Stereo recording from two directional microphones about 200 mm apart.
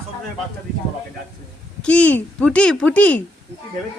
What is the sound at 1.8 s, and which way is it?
Speech, 5° left (ahead or behind).